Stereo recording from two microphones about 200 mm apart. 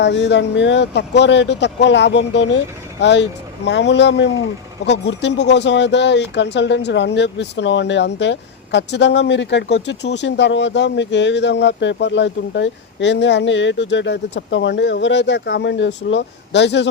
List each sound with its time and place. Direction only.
0.0 s speech: 60° left (ahead or behind)